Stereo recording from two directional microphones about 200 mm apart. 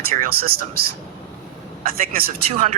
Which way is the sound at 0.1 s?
50° right (ahead or behind).